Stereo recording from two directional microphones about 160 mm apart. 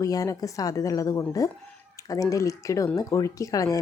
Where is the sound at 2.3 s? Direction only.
20° left (ahead or behind).